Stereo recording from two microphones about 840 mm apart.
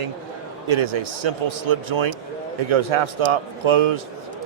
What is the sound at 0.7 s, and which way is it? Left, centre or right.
A man's voice, right.